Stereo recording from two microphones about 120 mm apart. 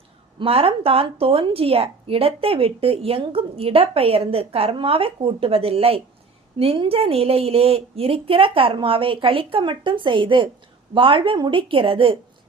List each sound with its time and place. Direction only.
0.3 s a woman's voice: 50° right (ahead or behind)